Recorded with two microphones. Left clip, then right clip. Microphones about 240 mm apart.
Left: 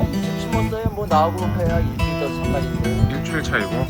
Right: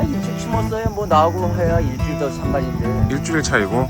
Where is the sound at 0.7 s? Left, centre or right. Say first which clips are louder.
Right 3 dB; right.